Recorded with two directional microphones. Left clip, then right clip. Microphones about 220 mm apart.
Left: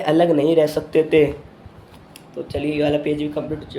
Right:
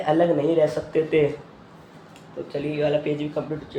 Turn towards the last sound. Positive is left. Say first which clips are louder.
# left 3 dB
turn(degrees=20)  # may be behind; listen again after turning